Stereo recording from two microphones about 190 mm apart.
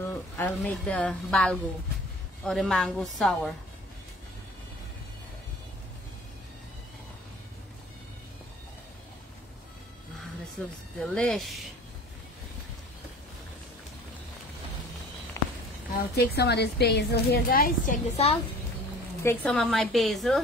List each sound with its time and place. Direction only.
0.4 s speech: 5° left (ahead or behind)
10.6 s speech: 5° left (ahead or behind)
16.0 s a woman's voice: 60° left (ahead or behind); by 18.4 s 35° left (ahead or behind)
19.2 s speech: 5° left (ahead or behind)